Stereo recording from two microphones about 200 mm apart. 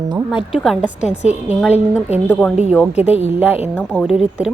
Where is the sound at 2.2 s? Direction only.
5° left (ahead or behind).